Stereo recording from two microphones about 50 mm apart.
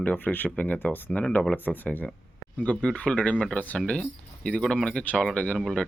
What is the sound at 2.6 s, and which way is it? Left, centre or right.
Speech, left.